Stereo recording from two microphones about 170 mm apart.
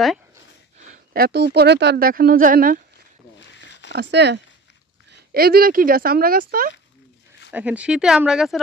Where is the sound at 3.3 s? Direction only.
90° left.